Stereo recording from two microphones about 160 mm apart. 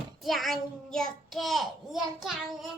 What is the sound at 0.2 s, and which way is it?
A child's voice, centre (ahead or behind).